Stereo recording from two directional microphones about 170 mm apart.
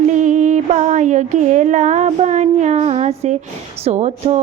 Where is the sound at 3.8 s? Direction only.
40° right (ahead or behind).